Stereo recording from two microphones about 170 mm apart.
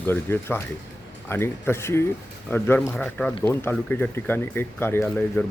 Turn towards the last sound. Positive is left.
turn(degrees=10)  # may be behind; listen again after turning